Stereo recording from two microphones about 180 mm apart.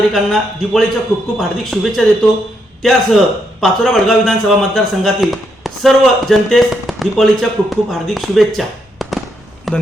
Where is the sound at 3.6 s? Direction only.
Centre (ahead or behind).